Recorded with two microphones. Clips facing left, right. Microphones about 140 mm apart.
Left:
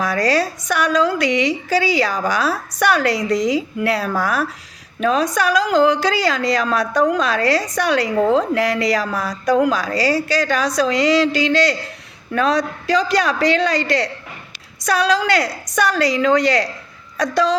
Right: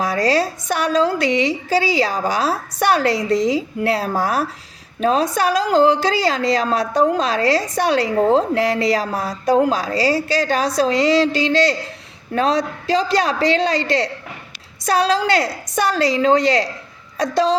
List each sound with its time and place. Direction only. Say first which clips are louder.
0.0 s a woman's voice: even; 25° right (ahead or behind)